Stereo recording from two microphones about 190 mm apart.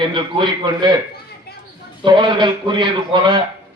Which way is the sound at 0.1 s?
25° right (ahead or behind).